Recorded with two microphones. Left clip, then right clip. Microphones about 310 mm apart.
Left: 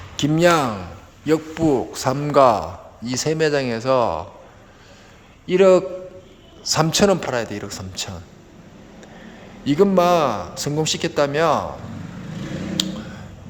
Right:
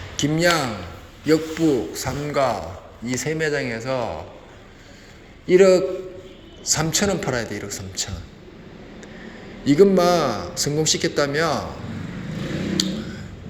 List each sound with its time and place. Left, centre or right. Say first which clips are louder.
0.2 s a man's voice: left 3 dB; centre
5.5 s a man's voice: even; centre
9.6 s a man's voice: even; centre
12.7 s a sound: left 2 dB; centre